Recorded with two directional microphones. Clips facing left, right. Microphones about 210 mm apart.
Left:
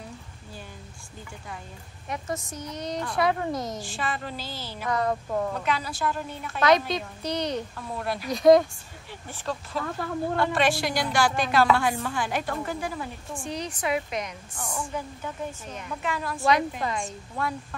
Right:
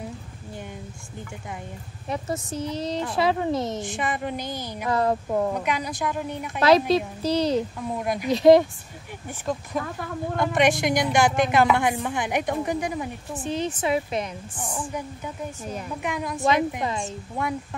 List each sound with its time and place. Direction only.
2.0 s a woman's voice: 30° right (ahead or behind)
4.8 s speech: 30° right (ahead or behind)
5.5 s a woman's voice: 15° right (ahead or behind)
6.6 s speech: 30° right (ahead or behind)
7.2 s a woman's voice: 5° right (ahead or behind)
7.9 s speech: 15° right (ahead or behind)
9.7 s a woman's voice: 15° right (ahead or behind)
14.5 s a woman's voice: 15° right (ahead or behind)